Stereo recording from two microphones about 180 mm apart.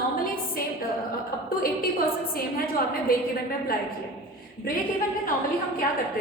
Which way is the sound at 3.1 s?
55° left (ahead or behind).